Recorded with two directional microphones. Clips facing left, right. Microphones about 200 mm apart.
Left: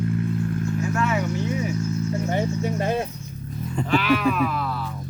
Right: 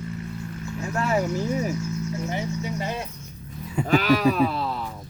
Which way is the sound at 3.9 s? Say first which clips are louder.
Right 1 dB; 40° right (ahead or behind).